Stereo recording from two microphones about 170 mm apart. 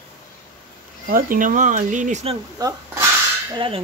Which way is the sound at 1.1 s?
55° right (ahead or behind).